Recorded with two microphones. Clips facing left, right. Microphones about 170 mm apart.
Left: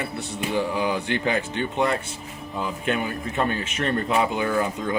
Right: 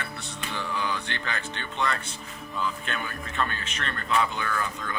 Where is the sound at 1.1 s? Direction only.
10° left (ahead or behind).